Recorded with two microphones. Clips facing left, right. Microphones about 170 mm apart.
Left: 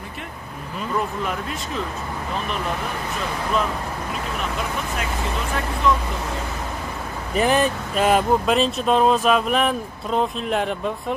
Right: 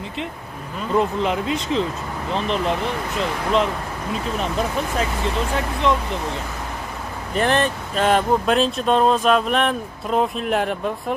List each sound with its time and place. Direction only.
0.9 s speech: 20° right (ahead or behind)
5.9 s speech: 25° right (ahead or behind)
7.3 s speech: 5° left (ahead or behind)